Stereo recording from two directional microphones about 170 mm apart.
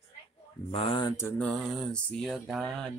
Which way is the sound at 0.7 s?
30° left (ahead or behind).